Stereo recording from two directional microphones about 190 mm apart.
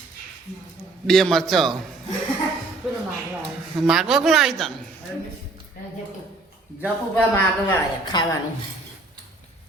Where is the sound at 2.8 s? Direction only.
5° right (ahead or behind).